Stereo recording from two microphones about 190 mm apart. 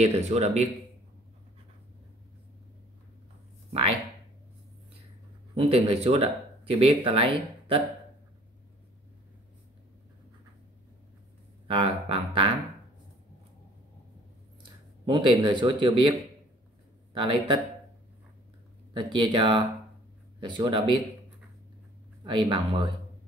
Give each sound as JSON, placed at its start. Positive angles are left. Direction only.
{"t": 0.0, "sound": "a man's voice", "side_deg": -35}
{"t": 5.7, "sound": "speech", "side_deg": -30}
{"t": 11.6, "sound": "speech", "side_deg": -30}
{"t": 14.6, "sound": "speech", "side_deg": -25}
{"t": 18.9, "sound": "speech", "side_deg": -25}
{"t": 22.2, "sound": "speech", "side_deg": -25}